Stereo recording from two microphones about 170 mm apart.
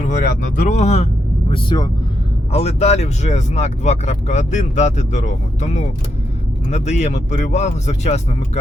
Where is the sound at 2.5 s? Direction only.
40° left (ahead or behind).